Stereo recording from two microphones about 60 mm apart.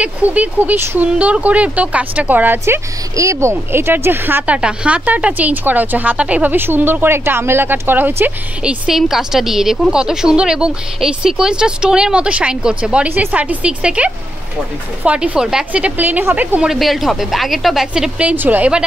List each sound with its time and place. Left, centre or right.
0.0 s speech: right
3.2 s speech: right
4.5 s speech: centre
6.5 s speech: right
8.6 s a woman's voice: centre
13.1 s speech: right
16.7 s a woman's voice: centre
18.3 s speech: right